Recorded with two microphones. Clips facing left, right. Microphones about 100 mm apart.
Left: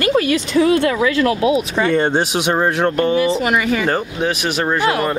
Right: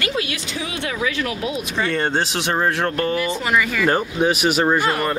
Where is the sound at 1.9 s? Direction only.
15° left (ahead or behind).